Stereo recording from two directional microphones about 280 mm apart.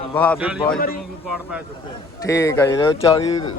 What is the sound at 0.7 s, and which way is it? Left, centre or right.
Speech, left.